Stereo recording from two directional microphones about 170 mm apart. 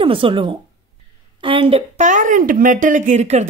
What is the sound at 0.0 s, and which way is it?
Speech, 30° right (ahead or behind).